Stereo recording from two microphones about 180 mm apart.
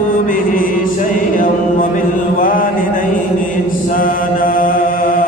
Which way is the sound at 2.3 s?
50° left (ahead or behind).